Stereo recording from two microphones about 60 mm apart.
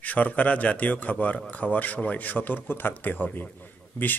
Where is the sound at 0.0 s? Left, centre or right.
Left.